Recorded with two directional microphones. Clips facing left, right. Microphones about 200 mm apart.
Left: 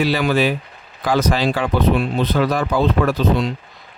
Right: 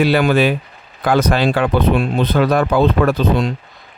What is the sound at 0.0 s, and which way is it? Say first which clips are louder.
Speech: right 4 dB; 55° right (ahead or behind).